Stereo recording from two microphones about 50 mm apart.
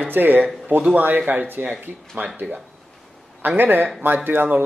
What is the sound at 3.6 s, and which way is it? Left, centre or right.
Speech, right.